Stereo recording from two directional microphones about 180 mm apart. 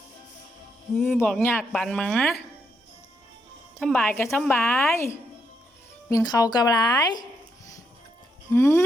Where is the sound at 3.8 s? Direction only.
10° left (ahead or behind).